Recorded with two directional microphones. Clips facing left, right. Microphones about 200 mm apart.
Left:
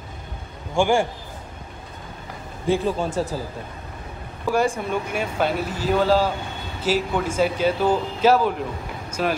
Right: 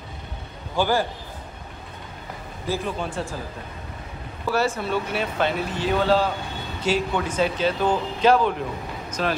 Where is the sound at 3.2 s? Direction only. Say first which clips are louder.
Left 5 dB; 35° left (ahead or behind).